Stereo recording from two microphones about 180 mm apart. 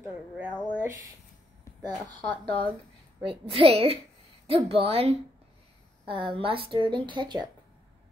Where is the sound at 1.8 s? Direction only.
25° right (ahead or behind).